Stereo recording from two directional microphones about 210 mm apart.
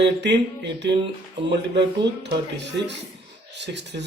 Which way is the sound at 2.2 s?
55° right (ahead or behind).